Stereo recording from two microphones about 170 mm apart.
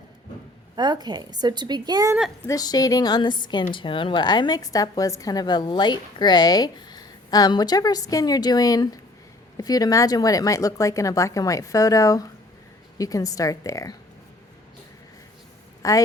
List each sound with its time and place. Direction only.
0.8 s a woman's voice: 25° right (ahead or behind)
2.4 s a woman's voice: 20° left (ahead or behind)
15.8 s a woman's voice: 20° left (ahead or behind)